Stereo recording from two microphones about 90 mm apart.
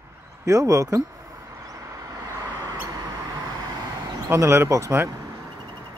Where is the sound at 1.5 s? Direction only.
35° right (ahead or behind).